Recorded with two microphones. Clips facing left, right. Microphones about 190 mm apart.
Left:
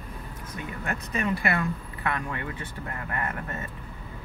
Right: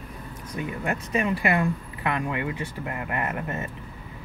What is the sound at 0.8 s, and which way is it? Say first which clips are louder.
Speech: right 3 dB; 15° right (ahead or behind).